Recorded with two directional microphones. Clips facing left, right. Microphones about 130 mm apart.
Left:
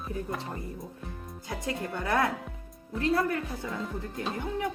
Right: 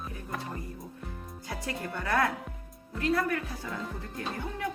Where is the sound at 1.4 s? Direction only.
20° left (ahead or behind).